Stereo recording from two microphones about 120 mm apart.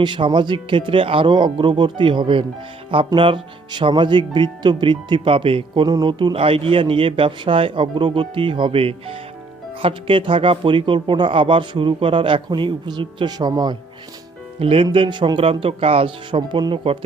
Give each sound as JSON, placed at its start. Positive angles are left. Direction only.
{"t": 0.0, "sound": "speech", "side_deg": -40}
{"t": 14.6, "sound": "speech", "side_deg": -50}